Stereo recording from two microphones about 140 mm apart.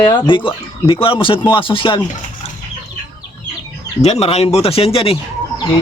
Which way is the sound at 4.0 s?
50° left (ahead or behind).